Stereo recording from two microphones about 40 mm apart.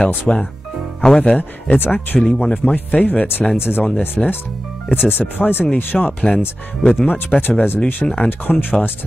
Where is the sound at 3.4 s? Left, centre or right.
Centre.